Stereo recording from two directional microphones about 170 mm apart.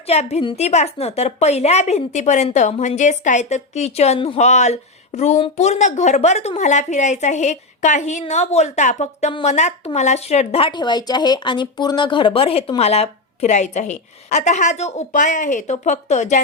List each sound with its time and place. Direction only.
0.1 s a woman's voice: 40° left (ahead or behind)